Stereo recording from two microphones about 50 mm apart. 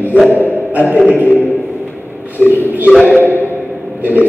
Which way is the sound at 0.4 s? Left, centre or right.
Right.